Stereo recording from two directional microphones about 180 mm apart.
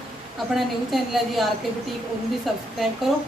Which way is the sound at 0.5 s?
Centre (ahead or behind).